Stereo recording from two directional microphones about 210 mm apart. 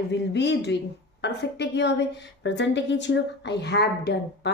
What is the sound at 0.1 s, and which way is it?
A woman's voice, 55° left (ahead or behind).